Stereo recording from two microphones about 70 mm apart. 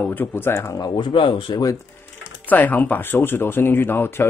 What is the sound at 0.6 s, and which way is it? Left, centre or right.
Speech, left.